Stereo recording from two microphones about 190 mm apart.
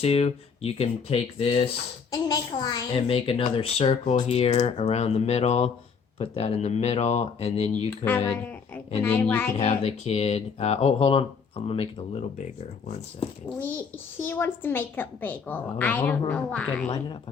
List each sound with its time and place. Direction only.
0.0 s speech: 35° left (ahead or behind)
8.3 s speech: 10° left (ahead or behind)
9.6 s speech: 35° left (ahead or behind)
13.6 s speech: 10° left (ahead or behind)